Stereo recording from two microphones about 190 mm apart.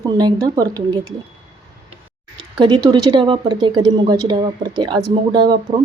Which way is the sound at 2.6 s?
20° right (ahead or behind).